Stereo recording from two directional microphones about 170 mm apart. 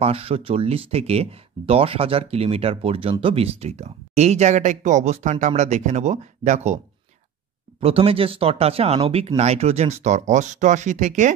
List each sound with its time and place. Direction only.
0.0 s speech: 35° right (ahead or behind)
7.8 s speech: 35° right (ahead or behind)